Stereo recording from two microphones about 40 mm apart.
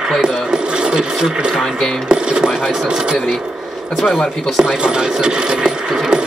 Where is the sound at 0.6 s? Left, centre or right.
Right.